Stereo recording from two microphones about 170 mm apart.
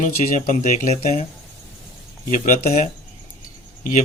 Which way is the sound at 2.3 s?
45° left (ahead or behind).